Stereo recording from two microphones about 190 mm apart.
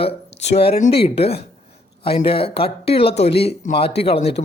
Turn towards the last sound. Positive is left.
turn(degrees=30)  # may be behind; listen again after turning